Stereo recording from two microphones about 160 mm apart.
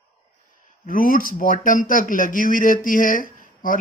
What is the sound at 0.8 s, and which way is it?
A man's voice, 60° left (ahead or behind).